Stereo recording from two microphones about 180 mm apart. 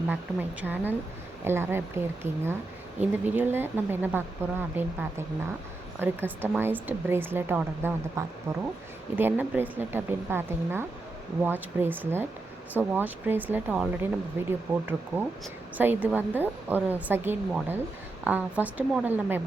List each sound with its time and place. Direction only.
0.1 s a woman's voice: 10° right (ahead or behind)
15.8 s a woman's voice: 10° right (ahead or behind)